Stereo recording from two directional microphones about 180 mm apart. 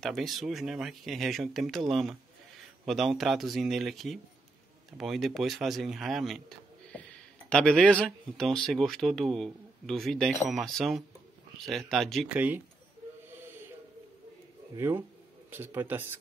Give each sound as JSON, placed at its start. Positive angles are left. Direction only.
{"t": 0.0, "sound": "speech", "side_deg": 0}
{"t": 7.4, "sound": "speech", "side_deg": 5}
{"t": 14.8, "sound": "speech", "side_deg": -15}